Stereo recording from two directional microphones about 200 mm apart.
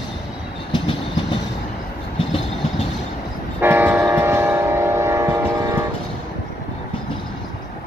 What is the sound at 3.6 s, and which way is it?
Train, 10° right (ahead or behind).